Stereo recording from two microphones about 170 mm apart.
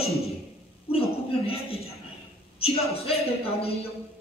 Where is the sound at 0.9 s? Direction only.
35° left (ahead or behind).